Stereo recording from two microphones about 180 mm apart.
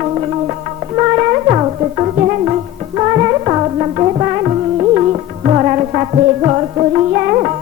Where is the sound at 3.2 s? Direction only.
30° right (ahead or behind).